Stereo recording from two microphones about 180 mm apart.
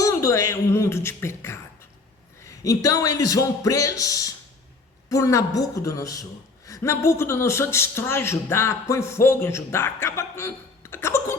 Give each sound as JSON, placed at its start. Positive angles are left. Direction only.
{"t": 0.0, "sound": "a man's voice", "side_deg": 15}